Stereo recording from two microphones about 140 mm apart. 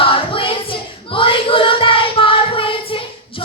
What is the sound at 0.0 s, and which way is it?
Singing, 40° left (ahead or behind).